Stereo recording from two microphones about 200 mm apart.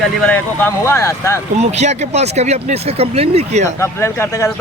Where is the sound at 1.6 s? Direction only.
35° right (ahead or behind).